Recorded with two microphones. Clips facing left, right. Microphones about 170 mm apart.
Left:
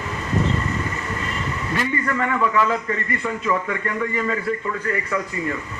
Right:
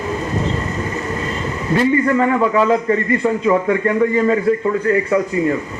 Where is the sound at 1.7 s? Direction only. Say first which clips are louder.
Right 10 dB; 30° right (ahead or behind).